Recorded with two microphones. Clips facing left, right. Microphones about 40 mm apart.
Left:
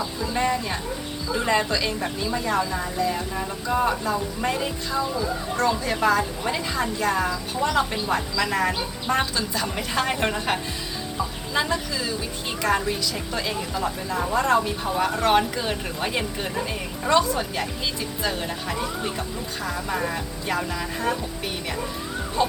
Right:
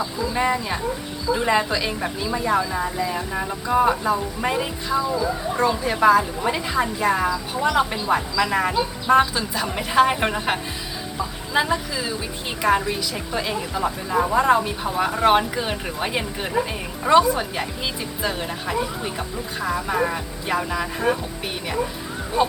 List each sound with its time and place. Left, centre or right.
0.3 s a woman's voice: centre
22.4 s a woman's voice: centre